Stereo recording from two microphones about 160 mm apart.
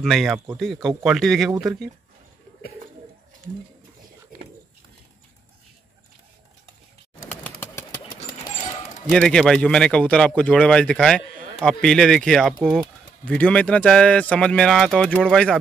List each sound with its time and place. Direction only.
0.0 s a man's voice: centre (ahead or behind)
7.6 s a sound: 20° left (ahead or behind)
9.1 s a man's voice: 5° left (ahead or behind)